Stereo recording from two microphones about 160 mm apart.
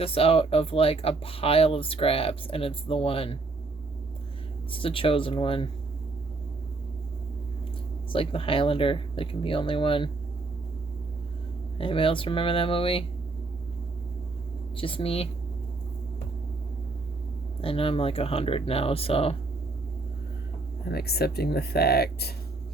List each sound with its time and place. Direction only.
0.0 s speech: 35° left (ahead or behind)
4.7 s speech: 35° left (ahead or behind)
8.1 s speech: 35° left (ahead or behind)
11.8 s speech: 35° left (ahead or behind)
14.8 s speech: 35° left (ahead or behind)
17.6 s speech: 35° left (ahead or behind)
20.8 s speech: 80° left